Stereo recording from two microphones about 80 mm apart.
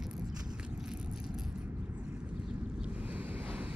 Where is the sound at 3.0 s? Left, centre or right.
Right.